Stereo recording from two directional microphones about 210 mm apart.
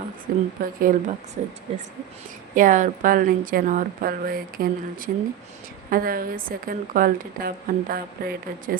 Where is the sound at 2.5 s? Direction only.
40° right (ahead or behind).